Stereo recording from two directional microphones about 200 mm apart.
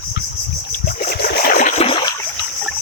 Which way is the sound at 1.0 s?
45° left (ahead or behind).